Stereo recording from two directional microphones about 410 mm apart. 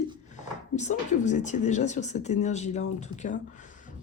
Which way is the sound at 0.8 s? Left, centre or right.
Centre.